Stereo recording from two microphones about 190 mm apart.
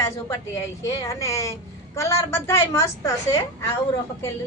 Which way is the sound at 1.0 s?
15° left (ahead or behind).